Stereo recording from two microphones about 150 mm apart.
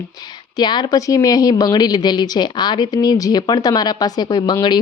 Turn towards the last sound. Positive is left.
turn(degrees=30)  # may be behind; listen again after turning